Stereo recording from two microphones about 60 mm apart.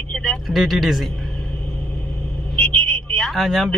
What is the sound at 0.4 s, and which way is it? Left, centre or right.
Speech, centre.